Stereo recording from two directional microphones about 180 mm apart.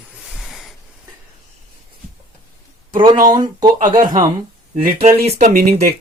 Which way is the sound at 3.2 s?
25° right (ahead or behind).